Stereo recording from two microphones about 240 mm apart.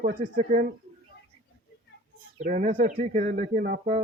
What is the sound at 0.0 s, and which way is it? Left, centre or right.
Speech, right.